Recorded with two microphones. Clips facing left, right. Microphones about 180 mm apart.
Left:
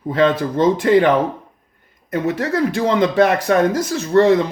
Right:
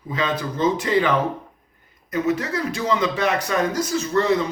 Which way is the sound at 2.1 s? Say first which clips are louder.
Left 3 dB; 55° left (ahead or behind).